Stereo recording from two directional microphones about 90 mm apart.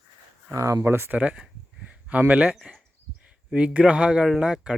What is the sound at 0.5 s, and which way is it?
Speech, 30° right (ahead or behind).